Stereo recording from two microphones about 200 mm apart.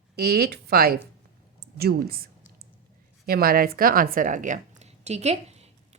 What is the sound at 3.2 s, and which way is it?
A woman's voice, 50° right (ahead or behind).